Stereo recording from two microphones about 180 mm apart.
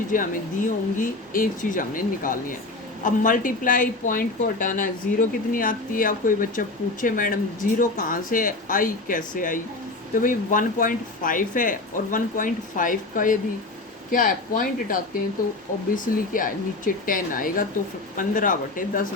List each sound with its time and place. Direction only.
0.1 s speech: 45° left (ahead or behind)
16.3 s speech: 50° left (ahead or behind)